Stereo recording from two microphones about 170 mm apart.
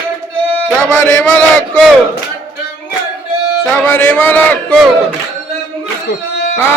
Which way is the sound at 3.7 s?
15° left (ahead or behind).